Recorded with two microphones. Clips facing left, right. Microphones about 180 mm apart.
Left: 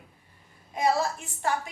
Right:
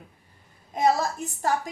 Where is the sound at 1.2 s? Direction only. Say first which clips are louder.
Right 3 dB; 40° right (ahead or behind).